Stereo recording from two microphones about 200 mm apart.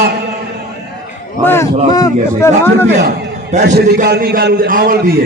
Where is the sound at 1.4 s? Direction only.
10° left (ahead or behind).